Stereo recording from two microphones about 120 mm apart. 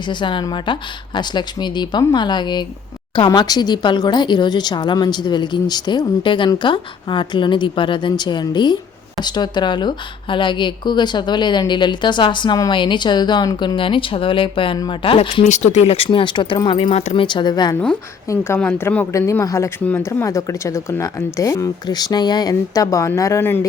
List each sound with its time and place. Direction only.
0.1 s speech: 40° left (ahead or behind)
15.4 s speech: 75° left (ahead or behind); by 16.0 s 60° left (ahead or behind)
16.0 s speech: 40° left (ahead or behind)
17.2 s speech: 40° left (ahead or behind)
18.3 s a woman's voice: 20° left (ahead or behind)
19.8 s speech: 15° left (ahead or behind)
20.1 s a woman's voice: 25° left (ahead or behind)